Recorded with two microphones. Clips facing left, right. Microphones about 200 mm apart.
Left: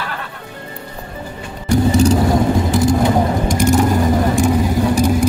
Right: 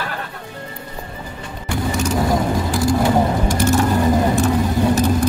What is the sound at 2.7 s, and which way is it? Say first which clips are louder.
Vehicle: right 1 dB; 20° left (ahead or behind).